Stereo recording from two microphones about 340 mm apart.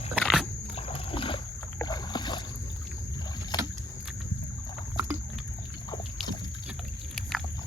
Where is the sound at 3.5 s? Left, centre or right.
Centre.